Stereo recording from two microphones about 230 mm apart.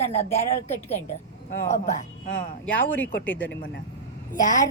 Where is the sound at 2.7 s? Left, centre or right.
Centre.